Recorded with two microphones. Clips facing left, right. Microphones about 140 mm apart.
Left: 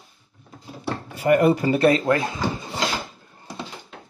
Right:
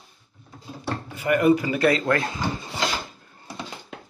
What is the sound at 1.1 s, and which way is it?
Speech, 35° left (ahead or behind).